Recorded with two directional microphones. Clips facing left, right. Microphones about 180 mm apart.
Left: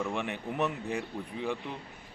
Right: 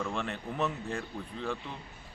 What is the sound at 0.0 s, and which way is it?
Speech, 15° left (ahead or behind).